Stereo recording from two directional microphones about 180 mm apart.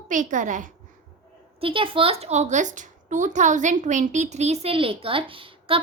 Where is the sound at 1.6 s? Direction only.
30° right (ahead or behind).